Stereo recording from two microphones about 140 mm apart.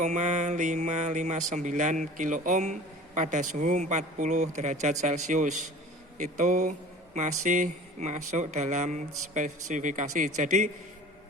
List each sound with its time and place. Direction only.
0.0 s speech: 60° right (ahead or behind)